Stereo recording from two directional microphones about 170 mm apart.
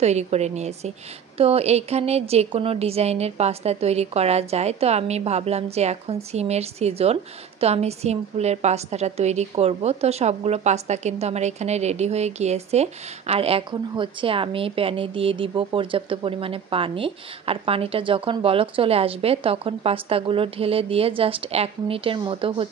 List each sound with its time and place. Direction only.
0.0 s a woman's voice: 40° right (ahead or behind)